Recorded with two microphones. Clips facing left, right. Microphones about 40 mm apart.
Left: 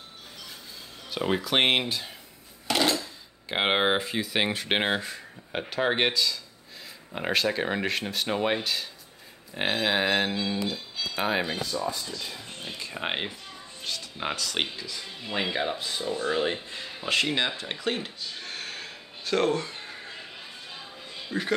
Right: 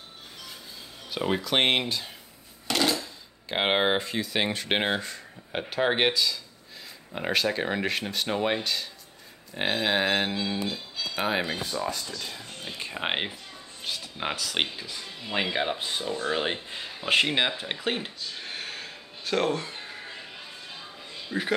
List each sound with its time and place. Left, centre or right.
1.1 s speech: centre
2.7 s a sound: centre
3.4 s speech: centre
12.9 s speech: centre
17.5 s a sound: centre
21.3 s speech: centre